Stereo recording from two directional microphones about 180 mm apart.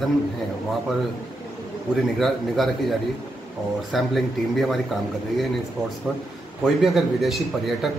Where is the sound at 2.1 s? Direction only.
Centre (ahead or behind).